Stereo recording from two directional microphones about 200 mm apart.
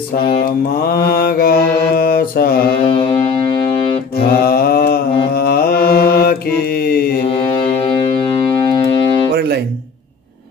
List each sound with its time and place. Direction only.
0.8 s mantra: 50° left (ahead or behind)
2.8 s music: 30° left (ahead or behind)
4.5 s mantra: 50° left (ahead or behind)
7.2 s music: 30° left (ahead or behind)
9.3 s guitar: 55° right (ahead or behind)